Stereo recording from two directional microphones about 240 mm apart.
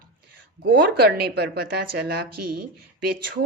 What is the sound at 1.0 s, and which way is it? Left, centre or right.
A woman's voice, right.